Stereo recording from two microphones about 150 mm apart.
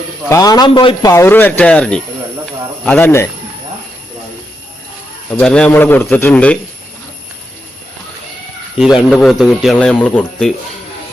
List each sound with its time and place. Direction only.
0.3 s a man's voice: 25° left (ahead or behind)
1.1 s a man's voice: 15° left (ahead or behind)
5.3 s speech: 5° left (ahead or behind)
8.8 s a man's voice: centre (ahead or behind)